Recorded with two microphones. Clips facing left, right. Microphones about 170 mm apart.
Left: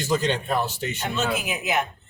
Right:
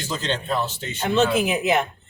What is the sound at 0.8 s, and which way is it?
Speech, 25° right (ahead or behind).